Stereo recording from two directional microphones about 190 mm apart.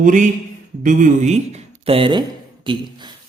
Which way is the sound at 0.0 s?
40° right (ahead or behind).